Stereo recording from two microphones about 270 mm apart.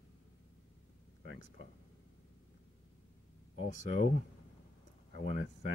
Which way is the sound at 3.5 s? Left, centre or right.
Left.